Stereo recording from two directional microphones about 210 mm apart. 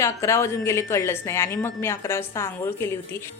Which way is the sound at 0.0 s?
15° left (ahead or behind).